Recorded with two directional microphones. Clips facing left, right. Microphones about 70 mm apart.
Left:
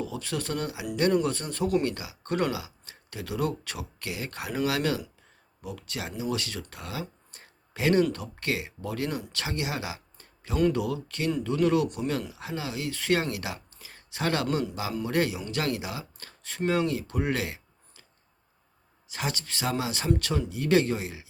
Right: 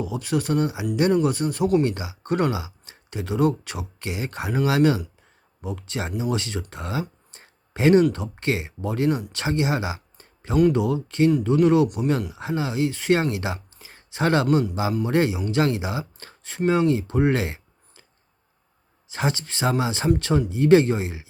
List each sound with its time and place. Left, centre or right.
0.0 s speech: centre
7.3 s a sound: right
8.1 s speech: right
19.0 s speech: right